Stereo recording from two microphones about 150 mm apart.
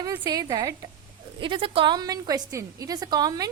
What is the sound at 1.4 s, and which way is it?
A woman's voice, 35° right (ahead or behind).